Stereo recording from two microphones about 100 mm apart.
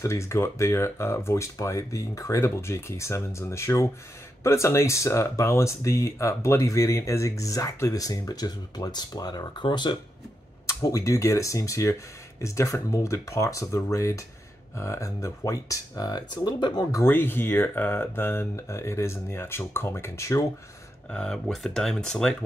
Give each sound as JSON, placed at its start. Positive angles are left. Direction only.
{"t": 0.0, "sound": "speech", "side_deg": 30}
{"t": 10.7, "sound": "speech", "side_deg": 35}
{"t": 17.0, "sound": "speech", "side_deg": 20}
{"t": 21.1, "sound": "speech", "side_deg": 10}